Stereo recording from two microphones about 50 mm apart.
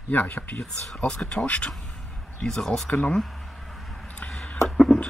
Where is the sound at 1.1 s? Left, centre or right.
Left.